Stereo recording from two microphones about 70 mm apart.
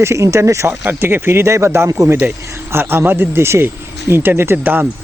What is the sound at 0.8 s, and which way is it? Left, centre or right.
Speech, right.